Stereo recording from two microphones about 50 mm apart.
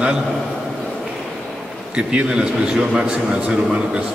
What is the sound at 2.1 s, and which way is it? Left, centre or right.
A man's voice, centre.